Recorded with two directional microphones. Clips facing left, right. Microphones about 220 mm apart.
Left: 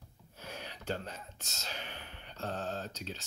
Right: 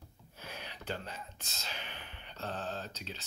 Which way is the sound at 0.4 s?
40° left (ahead or behind).